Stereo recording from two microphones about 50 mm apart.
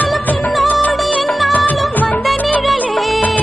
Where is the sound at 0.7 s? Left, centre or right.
Left.